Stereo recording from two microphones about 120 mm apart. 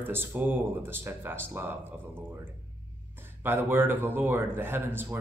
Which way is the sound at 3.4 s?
20° right (ahead or behind).